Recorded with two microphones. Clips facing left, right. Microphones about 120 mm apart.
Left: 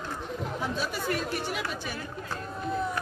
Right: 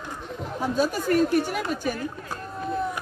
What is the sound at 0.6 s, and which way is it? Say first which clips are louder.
Speech: right 10 dB; 40° right (ahead or behind).